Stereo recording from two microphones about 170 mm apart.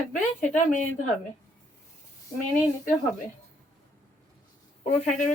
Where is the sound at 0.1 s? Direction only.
45° left (ahead or behind).